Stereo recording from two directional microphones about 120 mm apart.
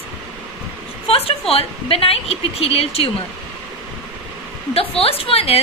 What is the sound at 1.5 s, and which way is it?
A woman's voice, 55° left (ahead or behind).